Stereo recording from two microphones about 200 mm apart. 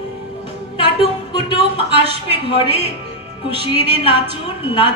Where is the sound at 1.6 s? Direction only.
30° right (ahead or behind).